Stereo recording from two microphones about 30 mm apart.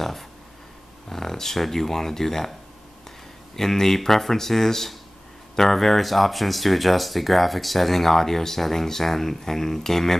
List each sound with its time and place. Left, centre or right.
1.0 s speech: centre
3.5 s speech: centre